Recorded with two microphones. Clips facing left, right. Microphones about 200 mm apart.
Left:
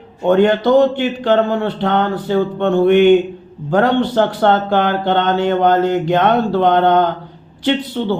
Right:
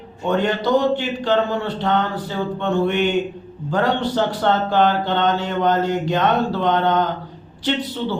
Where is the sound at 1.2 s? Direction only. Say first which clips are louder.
Left 5 dB; 55° left (ahead or behind).